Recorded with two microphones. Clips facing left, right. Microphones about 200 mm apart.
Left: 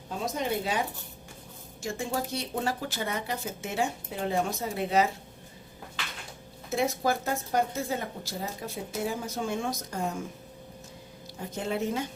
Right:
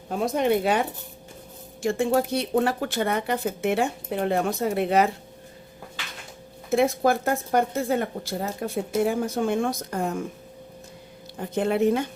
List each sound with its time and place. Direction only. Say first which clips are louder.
0.3 s speech: right 8 dB; 60° right (ahead or behind)
6.7 s speech: right 7 dB; 60° right (ahead or behind)
11.3 s speech: right 8 dB; 60° right (ahead or behind)